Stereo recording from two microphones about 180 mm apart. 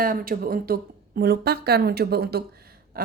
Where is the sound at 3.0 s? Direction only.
55° right (ahead or behind).